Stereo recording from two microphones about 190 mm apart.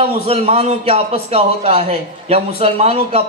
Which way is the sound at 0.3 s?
35° right (ahead or behind).